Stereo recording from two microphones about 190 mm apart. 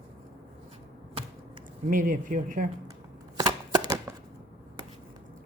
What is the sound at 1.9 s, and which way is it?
Speech, 45° right (ahead or behind).